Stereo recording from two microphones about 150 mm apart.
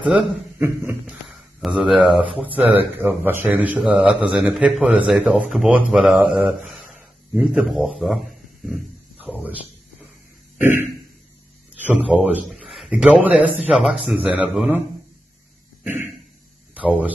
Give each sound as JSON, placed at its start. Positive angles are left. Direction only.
{"t": 0.0, "sound": "a man's voice", "side_deg": 0}
{"t": 0.6, "sound": "a man's voice", "side_deg": -15}
{"t": 1.3, "sound": "a man's voice", "side_deg": 0}
{"t": 9.2, "sound": "speech", "side_deg": -10}
{"t": 10.6, "sound": "a sound", "side_deg": -15}
{"t": 11.8, "sound": "a man's voice", "side_deg": -10}
{"t": 16.7, "sound": "speech", "side_deg": -10}